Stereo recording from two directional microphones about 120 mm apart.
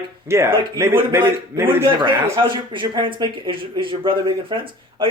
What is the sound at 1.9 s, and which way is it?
Speech, 40° right (ahead or behind).